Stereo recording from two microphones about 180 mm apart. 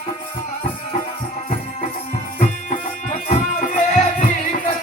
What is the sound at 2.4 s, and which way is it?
Music, 45° left (ahead or behind).